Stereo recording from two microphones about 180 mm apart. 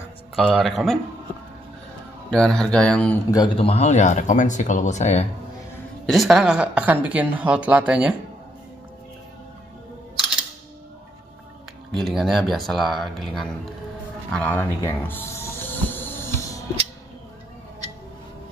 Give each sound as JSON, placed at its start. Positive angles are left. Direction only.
{"t": 0.5, "sound": "speech", "side_deg": 0}
{"t": 2.3, "sound": "speech", "side_deg": 5}
{"t": 3.5, "sound": "speech", "side_deg": 35}
{"t": 6.0, "sound": "speech", "side_deg": 0}
{"t": 11.9, "sound": "speech", "side_deg": 0}
{"t": 14.3, "sound": "a sound", "side_deg": 10}